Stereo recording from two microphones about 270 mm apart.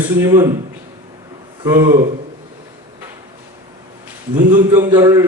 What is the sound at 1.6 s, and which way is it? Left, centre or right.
Speech, centre.